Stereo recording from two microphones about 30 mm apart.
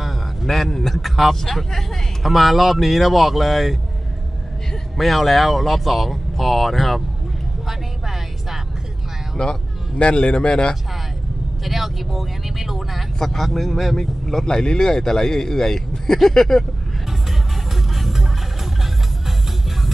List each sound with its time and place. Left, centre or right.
0.7 s a man's voice: centre
2.2 s speech: centre
4.9 s speech: centre
7.6 s a sound: centre
9.4 s speech: centre
9.9 s speech: left
11.6 s speech: centre
13.2 s speech: centre
14.4 s a man's voice: left
17.9 s music: centre